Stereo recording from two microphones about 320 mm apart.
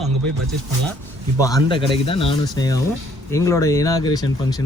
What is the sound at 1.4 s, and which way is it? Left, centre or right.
Speech, centre.